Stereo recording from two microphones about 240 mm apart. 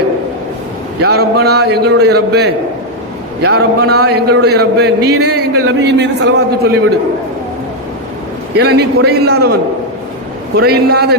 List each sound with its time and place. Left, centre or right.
1.0 s a man's voice: right
8.5 s a man's voice: right
10.6 s a man's voice: right